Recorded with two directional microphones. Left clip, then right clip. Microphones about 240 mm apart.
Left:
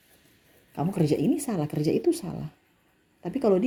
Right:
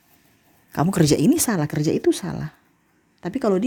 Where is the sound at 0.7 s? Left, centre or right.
Right.